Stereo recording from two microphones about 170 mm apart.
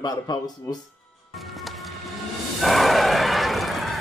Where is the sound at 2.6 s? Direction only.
Centre (ahead or behind).